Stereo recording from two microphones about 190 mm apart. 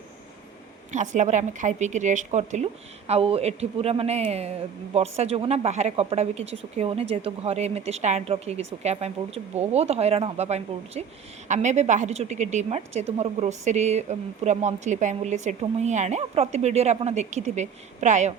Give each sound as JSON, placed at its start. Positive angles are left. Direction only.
{"t": 0.9, "sound": "speech", "side_deg": -40}